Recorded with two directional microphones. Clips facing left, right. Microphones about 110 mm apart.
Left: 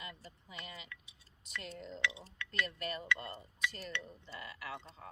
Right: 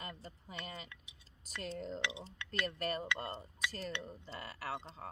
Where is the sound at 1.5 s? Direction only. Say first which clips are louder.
Right 4 dB; 35° right (ahead or behind).